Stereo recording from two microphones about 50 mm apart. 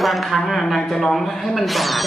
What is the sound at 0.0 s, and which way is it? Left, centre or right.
Speech, centre.